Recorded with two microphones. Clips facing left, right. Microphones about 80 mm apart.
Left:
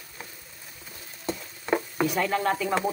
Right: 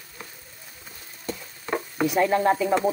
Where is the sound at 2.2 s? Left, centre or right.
Centre.